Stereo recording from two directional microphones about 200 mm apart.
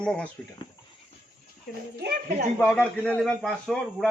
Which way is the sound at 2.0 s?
50° right (ahead or behind).